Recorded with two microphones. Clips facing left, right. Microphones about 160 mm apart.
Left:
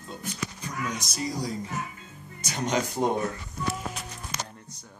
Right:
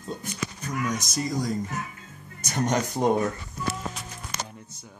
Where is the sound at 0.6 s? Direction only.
45° right (ahead or behind).